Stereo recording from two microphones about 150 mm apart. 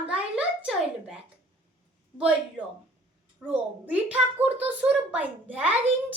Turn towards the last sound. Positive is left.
turn(degrees=-10)  # may be behind; listen again after turning